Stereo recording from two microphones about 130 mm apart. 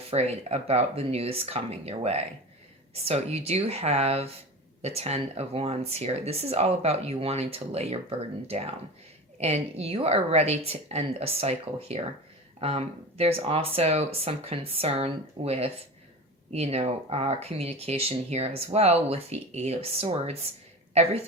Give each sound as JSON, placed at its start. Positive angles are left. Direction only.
{"t": 0.1, "sound": "a woman's voice", "side_deg": -55}